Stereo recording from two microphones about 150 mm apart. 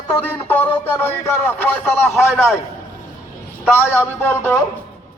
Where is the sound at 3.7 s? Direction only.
15° left (ahead or behind).